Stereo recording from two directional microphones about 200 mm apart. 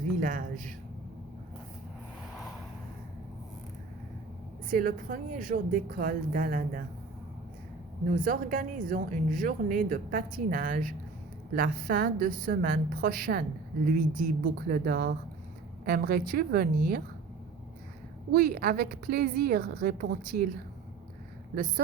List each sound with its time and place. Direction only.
0.2 s speech: 45° right (ahead or behind)
4.7 s speech: 45° right (ahead or behind)
8.1 s speech: 45° right (ahead or behind)
18.3 s speech: 50° right (ahead or behind)